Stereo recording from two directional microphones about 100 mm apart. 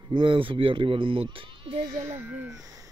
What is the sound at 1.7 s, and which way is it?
Speech, 40° right (ahead or behind).